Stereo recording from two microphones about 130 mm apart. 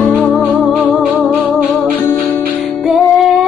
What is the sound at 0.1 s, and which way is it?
Music, 10° left (ahead or behind).